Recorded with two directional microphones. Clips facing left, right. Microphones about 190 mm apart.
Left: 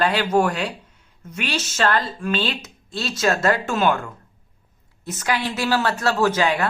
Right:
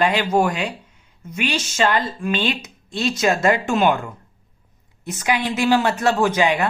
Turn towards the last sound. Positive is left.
turn(degrees=-15)  # may be behind; listen again after turning